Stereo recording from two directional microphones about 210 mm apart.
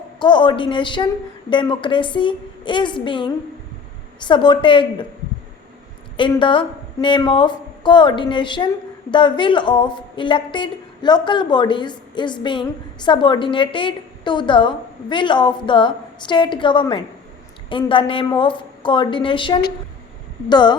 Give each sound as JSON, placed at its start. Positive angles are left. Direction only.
{"t": 0.2, "sound": "a woman's voice", "side_deg": 20}
{"t": 6.1, "sound": "a woman's voice", "side_deg": 25}